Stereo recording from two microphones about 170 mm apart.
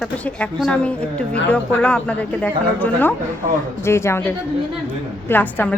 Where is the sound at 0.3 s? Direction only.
5° left (ahead or behind).